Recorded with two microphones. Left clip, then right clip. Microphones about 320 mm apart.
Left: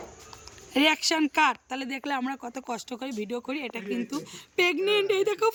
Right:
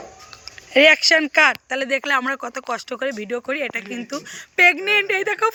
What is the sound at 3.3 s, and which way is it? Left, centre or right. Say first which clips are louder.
Speech: right 9 dB; centre.